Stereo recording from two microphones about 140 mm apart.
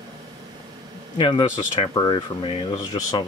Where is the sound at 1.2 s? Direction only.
35° left (ahead or behind).